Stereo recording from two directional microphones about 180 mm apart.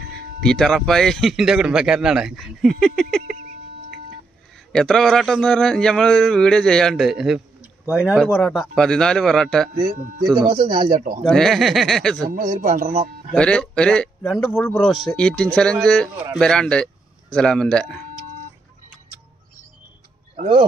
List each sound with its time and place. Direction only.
0.4 s a man's voice: centre (ahead or behind)
4.7 s a man's voice: 5° left (ahead or behind)
9.8 s speech: 50° right (ahead or behind)
10.3 s speech: 35° right (ahead or behind)
11.0 s speech: 45° right (ahead or behind)
11.2 s a man's voice: centre (ahead or behind)
12.3 s speech: 45° right (ahead or behind)
13.3 s a man's voice: 5° left (ahead or behind)